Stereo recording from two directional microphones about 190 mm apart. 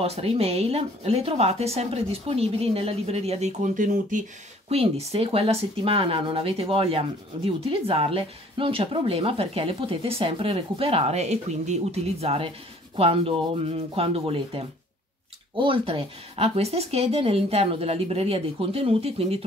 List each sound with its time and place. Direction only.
0.0 s speech: 30° right (ahead or behind)